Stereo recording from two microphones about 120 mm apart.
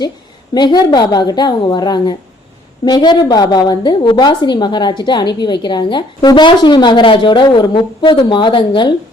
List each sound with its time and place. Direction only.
0.5 s a woman's voice: 35° left (ahead or behind)